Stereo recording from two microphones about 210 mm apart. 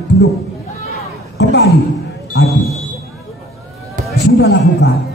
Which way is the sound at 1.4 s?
55° left (ahead or behind).